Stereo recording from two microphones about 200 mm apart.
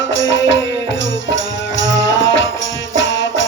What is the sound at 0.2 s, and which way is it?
Music, 65° left (ahead or behind).